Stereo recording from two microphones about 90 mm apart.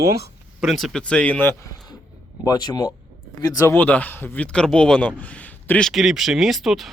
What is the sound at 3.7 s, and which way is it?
Speech, 15° left (ahead or behind).